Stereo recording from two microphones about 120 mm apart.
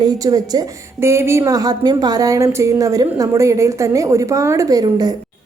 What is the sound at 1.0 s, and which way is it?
A woman's voice, 20° right (ahead or behind).